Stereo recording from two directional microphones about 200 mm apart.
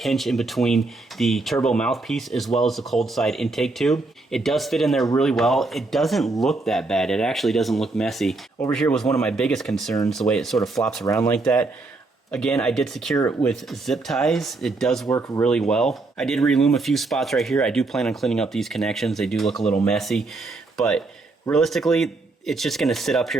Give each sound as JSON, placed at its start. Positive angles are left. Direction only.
{"t": 0.0, "sound": "speech", "side_deg": 0}
{"t": 15.0, "sound": "speech", "side_deg": 15}
{"t": 15.4, "sound": "speech", "side_deg": 5}